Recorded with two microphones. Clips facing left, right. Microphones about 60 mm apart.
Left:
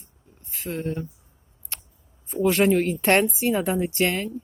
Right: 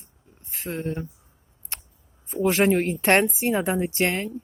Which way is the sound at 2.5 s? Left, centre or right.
Right.